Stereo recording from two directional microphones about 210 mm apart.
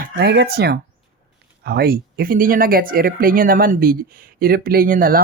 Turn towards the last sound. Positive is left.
turn(degrees=-40)  # may be behind; listen again after turning